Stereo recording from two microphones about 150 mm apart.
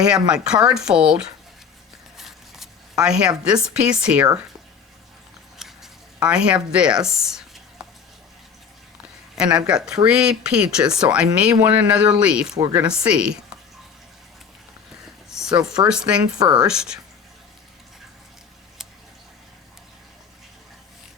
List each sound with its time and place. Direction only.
0.0 s speech: 5° right (ahead or behind)
2.1 s speech: centre (ahead or behind)
5.5 s a sound: centre (ahead or behind)
9.6 s speech: 5° right (ahead or behind)
12.5 s speech: 30° right (ahead or behind)
12.9 s speech: 5° right (ahead or behind)
15.8 s speech: 5° right (ahead or behind)